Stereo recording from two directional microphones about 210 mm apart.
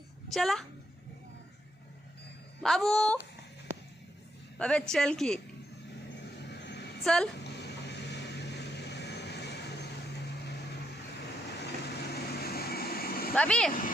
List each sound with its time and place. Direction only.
0.3 s speech: centre (ahead or behind)
2.6 s speech: centre (ahead or behind)
4.5 s speech: 5° left (ahead or behind)
6.5 s a sound: 55° left (ahead or behind)
7.0 s speech: centre (ahead or behind)
7.4 s vehicle: 55° left (ahead or behind)
11.6 s vehicle: 50° left (ahead or behind)
13.3 s speech: 5° left (ahead or behind)